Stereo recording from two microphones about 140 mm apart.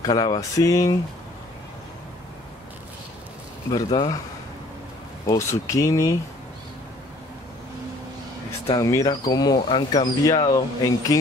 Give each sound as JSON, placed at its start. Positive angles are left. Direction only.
{"t": 0.0, "sound": "speech", "side_deg": 30}
{"t": 3.7, "sound": "speech", "side_deg": 30}
{"t": 5.2, "sound": "speech", "side_deg": 25}
{"t": 8.7, "sound": "speech", "side_deg": 25}